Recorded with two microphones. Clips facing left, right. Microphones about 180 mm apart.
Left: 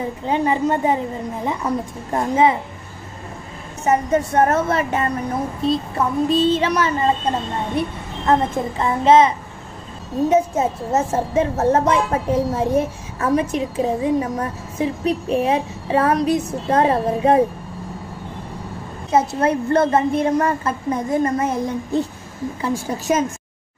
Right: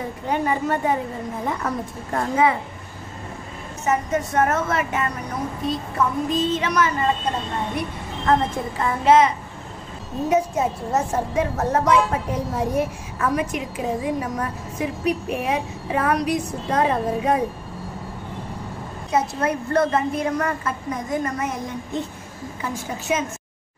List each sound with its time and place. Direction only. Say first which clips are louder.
0.3 s a woman's voice: left 3 dB; 20° left (ahead or behind)
3.8 s a woman's voice: left 5 dB; 30° left (ahead or behind)
8.3 s a woman's voice: left 3 dB; 25° left (ahead or behind)
10.3 s a woman's voice: left 1 dB; 25° left (ahead or behind)
19.1 s a woman's voice: left 5 dB; 25° left (ahead or behind)